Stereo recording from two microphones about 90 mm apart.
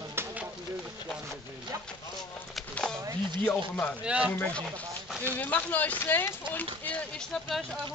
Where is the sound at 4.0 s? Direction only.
15° right (ahead or behind).